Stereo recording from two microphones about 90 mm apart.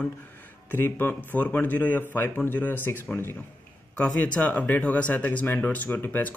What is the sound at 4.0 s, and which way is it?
A man's voice, 10° left (ahead or behind).